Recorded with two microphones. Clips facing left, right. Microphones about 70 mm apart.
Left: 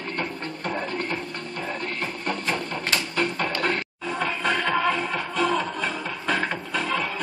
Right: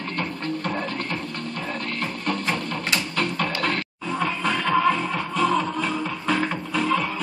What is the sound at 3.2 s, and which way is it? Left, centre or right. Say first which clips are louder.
Music: left 1 dB; centre.